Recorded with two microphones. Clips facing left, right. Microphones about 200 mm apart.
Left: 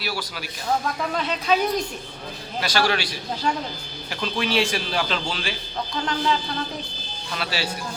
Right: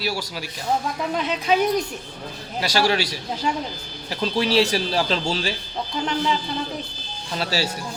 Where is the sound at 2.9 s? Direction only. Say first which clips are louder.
Right 2 dB; 40° right (ahead or behind).